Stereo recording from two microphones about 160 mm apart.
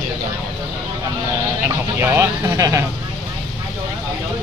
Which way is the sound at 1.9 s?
15° right (ahead or behind).